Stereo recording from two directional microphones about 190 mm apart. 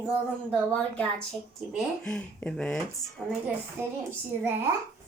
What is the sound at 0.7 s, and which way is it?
Speech, 5° left (ahead or behind).